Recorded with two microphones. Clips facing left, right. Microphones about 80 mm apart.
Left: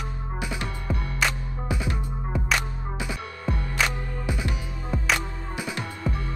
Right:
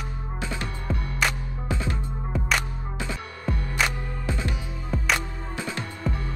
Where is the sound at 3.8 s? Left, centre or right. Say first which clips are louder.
Even; centre.